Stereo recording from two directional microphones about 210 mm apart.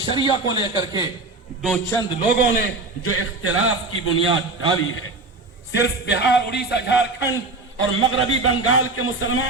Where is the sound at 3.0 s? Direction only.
90° left.